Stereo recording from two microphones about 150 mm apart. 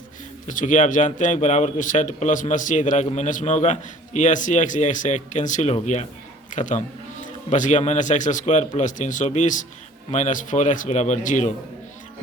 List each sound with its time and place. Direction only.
0.4 s speech: 60° left (ahead or behind)